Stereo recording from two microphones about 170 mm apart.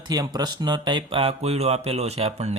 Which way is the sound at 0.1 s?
25° right (ahead or behind).